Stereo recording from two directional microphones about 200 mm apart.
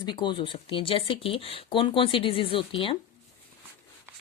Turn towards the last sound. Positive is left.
turn(degrees=25)  # may be behind; listen again after turning